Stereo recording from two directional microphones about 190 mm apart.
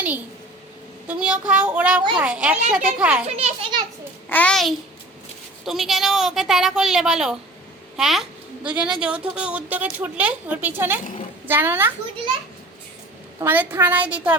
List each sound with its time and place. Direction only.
1.0 s a woman's voice: 5° right (ahead or behind)
3.2 s children playing: 30° right (ahead or behind)
4.3 s a woman's voice: 5° left (ahead or behind); by 11.9 s 10° right (ahead or behind)
13.4 s a woman's voice: 10° right (ahead or behind)